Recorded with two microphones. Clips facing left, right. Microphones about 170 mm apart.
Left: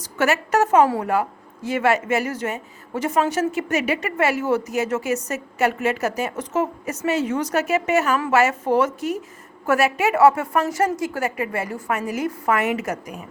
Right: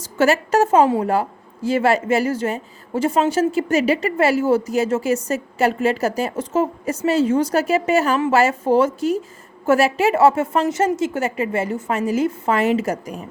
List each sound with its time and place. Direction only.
0.0 s a woman's voice: 30° right (ahead or behind)